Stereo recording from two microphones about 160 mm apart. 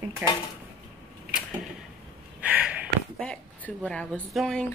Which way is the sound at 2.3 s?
10° right (ahead or behind).